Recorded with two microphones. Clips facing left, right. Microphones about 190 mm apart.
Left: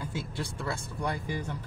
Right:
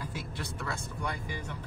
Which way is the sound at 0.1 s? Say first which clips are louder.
Left 3 dB; 30° left (ahead or behind).